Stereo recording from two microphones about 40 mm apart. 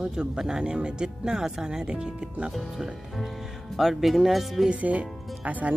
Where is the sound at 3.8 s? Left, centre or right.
Centre.